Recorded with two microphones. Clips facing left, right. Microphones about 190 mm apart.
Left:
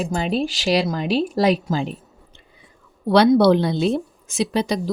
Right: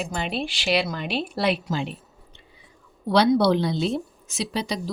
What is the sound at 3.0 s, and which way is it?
A woman's voice, 55° left (ahead or behind).